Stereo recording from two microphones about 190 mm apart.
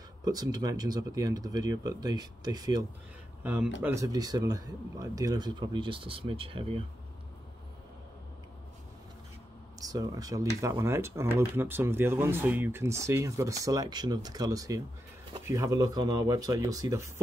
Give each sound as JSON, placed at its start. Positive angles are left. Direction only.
{"t": 0.2, "sound": "speech", "side_deg": -20}
{"t": 3.4, "sound": "speech", "side_deg": -10}
{"t": 9.8, "sound": "speech", "side_deg": -20}